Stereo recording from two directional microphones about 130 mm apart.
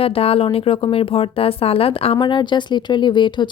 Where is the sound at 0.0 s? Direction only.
45° left (ahead or behind).